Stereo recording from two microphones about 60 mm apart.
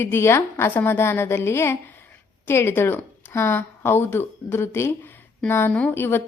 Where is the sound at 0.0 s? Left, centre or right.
Left.